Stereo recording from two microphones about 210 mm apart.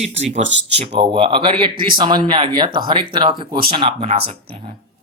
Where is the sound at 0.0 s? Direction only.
30° right (ahead or behind).